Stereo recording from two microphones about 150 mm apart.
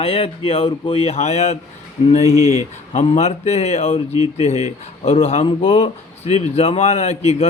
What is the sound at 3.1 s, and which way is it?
Speech, 45° left (ahead or behind).